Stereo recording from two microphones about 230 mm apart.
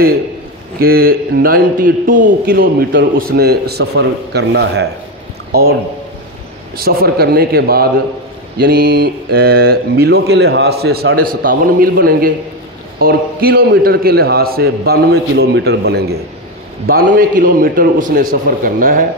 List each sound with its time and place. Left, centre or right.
0.7 s a man's voice: right
6.8 s a man's voice: right
8.5 s mantra: right
16.8 s a man's voice: right